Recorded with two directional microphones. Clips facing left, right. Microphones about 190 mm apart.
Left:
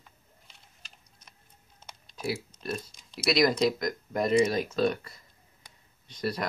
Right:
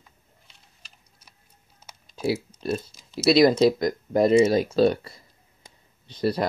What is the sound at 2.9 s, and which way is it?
Speech, 5° right (ahead or behind).